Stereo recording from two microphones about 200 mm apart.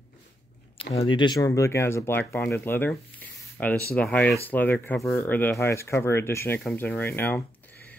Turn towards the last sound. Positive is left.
turn(degrees=10)  # may be behind; listen again after turning